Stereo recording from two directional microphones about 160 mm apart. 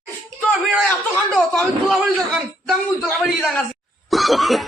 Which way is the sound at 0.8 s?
5° left (ahead or behind).